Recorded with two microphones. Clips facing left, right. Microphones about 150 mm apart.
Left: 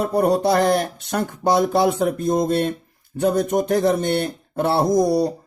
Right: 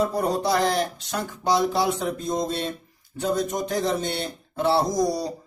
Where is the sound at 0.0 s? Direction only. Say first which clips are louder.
Left 5 dB; 60° left (ahead or behind).